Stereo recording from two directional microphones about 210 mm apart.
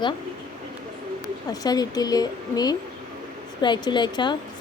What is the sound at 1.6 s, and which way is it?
A woman's voice, 20° left (ahead or behind).